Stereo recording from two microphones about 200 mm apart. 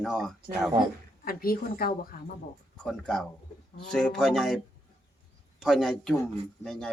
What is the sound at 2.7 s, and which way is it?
Speech, centre (ahead or behind).